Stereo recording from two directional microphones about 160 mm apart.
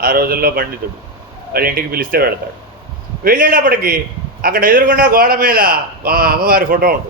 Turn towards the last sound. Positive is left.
turn(degrees=-65)  # may be behind; listen again after turning